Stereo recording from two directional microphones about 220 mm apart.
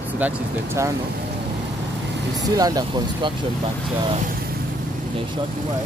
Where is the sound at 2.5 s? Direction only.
15° right (ahead or behind).